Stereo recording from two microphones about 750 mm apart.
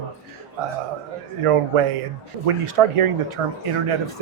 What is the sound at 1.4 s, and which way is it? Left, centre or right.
Speech, right.